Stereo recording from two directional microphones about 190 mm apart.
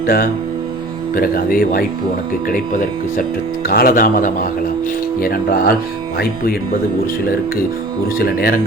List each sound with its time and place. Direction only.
0.0 s speech: 50° left (ahead or behind)
8.2 s speech: 55° left (ahead or behind)